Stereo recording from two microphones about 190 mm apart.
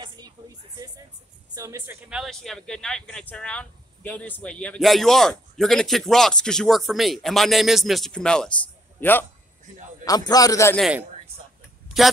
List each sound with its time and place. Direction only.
1.5 s a woman's voice: 15° right (ahead or behind)
2.0 s a man's voice: centre (ahead or behind); by 10.8 s 15° left (ahead or behind)
10.8 s speech: 5° right (ahead or behind)